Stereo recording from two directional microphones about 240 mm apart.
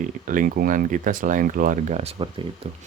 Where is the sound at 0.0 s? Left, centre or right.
Right.